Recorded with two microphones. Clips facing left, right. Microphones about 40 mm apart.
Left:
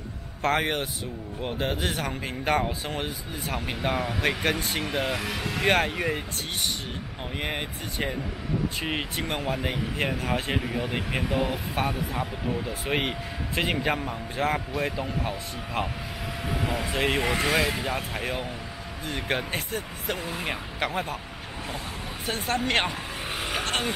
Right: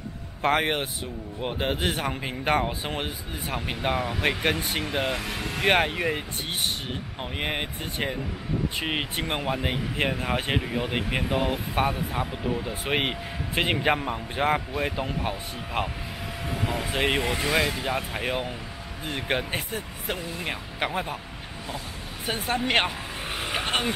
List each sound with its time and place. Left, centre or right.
0.4 s a man's voice: centre
5.1 s speech: centre
5.7 s speech: centre
7.3 s a man's voice: centre
16.4 s vehicle: centre
16.9 s speech: centre
17.2 s speech: centre
17.8 s speech: centre
18.2 s speech: centre
22.2 s speech: centre
22.8 s vehicle: centre
23.6 s vehicle: centre